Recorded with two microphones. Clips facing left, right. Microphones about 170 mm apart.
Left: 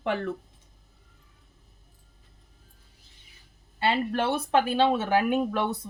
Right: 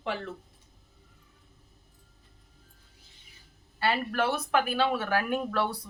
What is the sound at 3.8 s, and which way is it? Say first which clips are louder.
Speech: left 2 dB; 25° left (ahead or behind).